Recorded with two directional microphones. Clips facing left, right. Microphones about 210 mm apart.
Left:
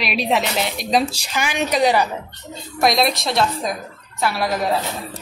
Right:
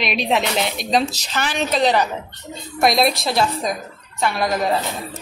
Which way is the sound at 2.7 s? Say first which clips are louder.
Right 1 dB; centre (ahead or behind).